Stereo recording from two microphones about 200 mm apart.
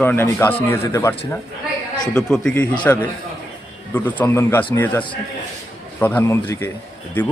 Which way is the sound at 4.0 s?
10° left (ahead or behind).